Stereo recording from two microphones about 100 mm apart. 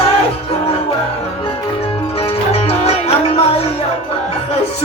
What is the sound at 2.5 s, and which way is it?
Music, 90° left.